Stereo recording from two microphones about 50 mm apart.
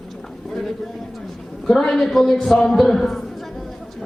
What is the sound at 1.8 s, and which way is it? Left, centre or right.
A man's voice, centre.